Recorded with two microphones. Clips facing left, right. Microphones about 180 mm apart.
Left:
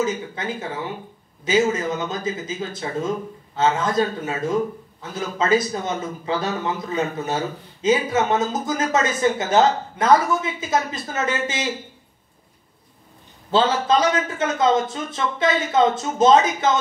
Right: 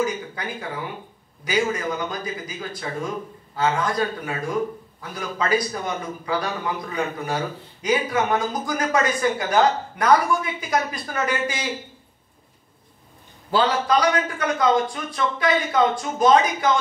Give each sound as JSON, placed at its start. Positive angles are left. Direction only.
{"t": 0.0, "sound": "a man's voice", "side_deg": 25}
{"t": 13.5, "sound": "a man's voice", "side_deg": 25}